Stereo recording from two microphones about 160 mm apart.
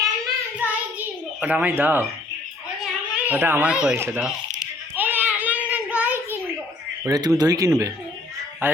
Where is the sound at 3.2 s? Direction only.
10° right (ahead or behind).